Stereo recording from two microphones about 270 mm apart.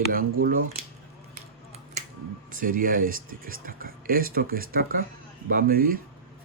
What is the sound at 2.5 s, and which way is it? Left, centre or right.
Speech, right.